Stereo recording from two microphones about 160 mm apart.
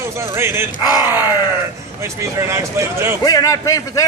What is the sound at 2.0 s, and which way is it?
Speech, 20° right (ahead or behind).